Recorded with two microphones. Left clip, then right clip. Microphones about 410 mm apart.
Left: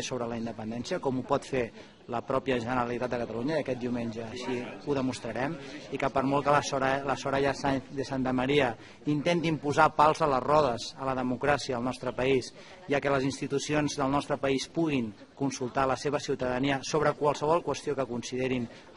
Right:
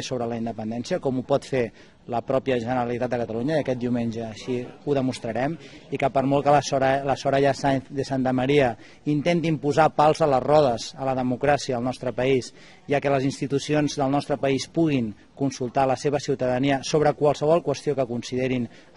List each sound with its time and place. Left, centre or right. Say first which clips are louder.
0.0 s a man's voice: right 5 dB; right